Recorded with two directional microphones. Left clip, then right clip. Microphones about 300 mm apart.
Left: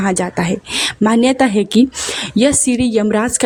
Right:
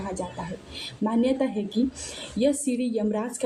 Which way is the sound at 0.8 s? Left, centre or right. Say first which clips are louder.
Left 12 dB; left.